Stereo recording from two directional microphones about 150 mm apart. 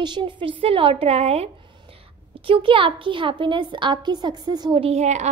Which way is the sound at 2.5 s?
35° right (ahead or behind).